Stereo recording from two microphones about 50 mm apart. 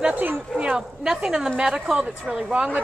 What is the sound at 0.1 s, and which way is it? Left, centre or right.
Speech, right.